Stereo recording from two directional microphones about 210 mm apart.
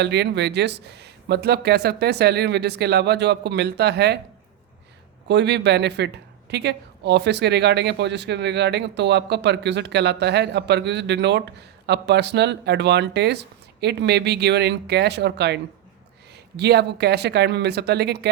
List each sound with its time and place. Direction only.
0.0 s speech: 55° right (ahead or behind)
5.3 s speech: 55° right (ahead or behind)